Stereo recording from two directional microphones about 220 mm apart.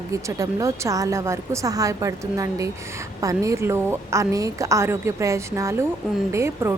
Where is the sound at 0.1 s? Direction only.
15° right (ahead or behind).